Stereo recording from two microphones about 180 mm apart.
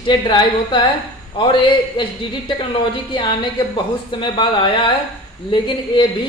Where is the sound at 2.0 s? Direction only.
25° left (ahead or behind).